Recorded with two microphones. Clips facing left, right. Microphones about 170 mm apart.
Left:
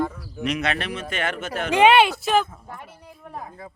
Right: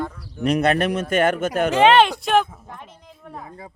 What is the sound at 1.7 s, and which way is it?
Speech, 10° left (ahead or behind).